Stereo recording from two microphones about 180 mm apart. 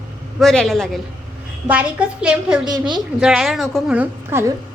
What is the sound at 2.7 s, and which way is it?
Speech, 25° right (ahead or behind).